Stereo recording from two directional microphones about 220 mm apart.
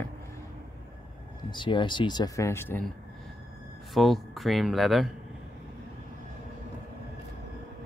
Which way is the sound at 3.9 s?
Centre (ahead or behind).